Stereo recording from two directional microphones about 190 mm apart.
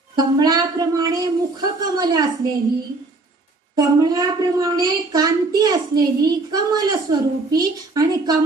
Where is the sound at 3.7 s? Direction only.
20° right (ahead or behind).